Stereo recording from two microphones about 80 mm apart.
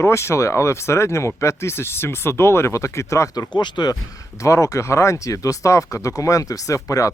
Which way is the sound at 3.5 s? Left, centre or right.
Left.